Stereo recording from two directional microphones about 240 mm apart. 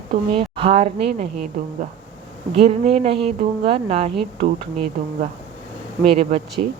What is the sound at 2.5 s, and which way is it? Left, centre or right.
Speech, right.